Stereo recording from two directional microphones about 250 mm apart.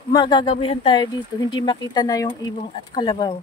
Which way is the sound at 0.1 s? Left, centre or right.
Centre.